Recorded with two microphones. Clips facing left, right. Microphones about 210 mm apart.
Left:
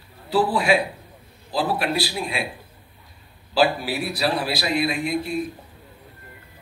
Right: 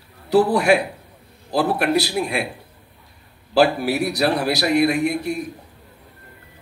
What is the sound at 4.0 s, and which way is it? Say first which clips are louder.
A man's voice: right 3 dB; 70° right (ahead or behind).